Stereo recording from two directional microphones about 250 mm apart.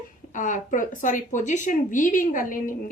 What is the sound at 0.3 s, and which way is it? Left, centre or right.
Speech, left.